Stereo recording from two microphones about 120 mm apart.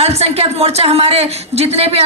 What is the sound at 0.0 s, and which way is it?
Speech, 60° right (ahead or behind).